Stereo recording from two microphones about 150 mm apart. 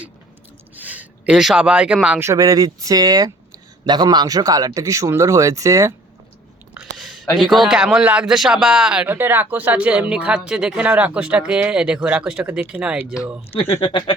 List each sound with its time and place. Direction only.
0.8 s speech: 10° right (ahead or behind)
6.7 s a man's voice: centre (ahead or behind)